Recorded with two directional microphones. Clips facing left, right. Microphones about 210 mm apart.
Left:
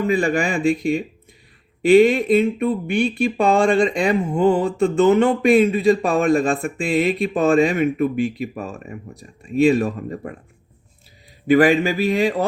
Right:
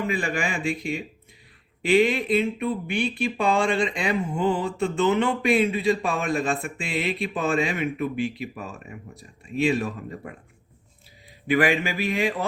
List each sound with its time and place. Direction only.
0.1 s a man's voice: 40° left (ahead or behind)
11.4 s a man's voice: 40° left (ahead or behind)